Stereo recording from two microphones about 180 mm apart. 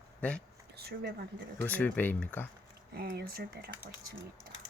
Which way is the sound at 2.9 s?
60° right (ahead or behind).